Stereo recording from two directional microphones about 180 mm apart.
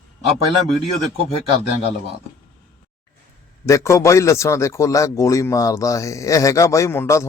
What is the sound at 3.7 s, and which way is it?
A man's voice, 15° left (ahead or behind).